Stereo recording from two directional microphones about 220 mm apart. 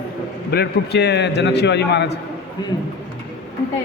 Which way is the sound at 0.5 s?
50° left (ahead or behind).